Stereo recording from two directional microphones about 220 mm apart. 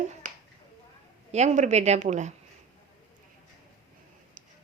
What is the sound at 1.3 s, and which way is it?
Speech, 30° right (ahead or behind).